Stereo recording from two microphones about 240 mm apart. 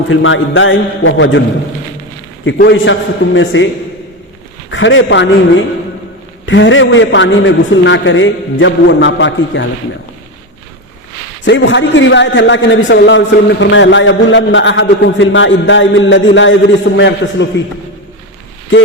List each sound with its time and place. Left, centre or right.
0.1 s a man's voice: left
2.4 s a man's voice: left
4.7 s a man's voice: left
11.4 s a man's voice: left